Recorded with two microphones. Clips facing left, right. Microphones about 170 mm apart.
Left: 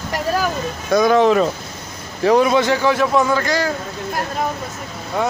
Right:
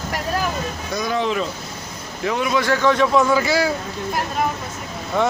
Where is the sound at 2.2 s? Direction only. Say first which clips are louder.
Left 7 dB; 35° left (ahead or behind).